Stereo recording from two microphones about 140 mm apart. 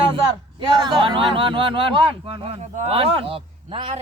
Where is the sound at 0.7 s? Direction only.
30° right (ahead or behind).